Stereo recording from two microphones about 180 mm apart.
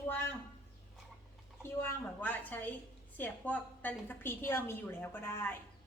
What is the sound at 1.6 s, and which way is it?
A woman's voice, 10° left (ahead or behind).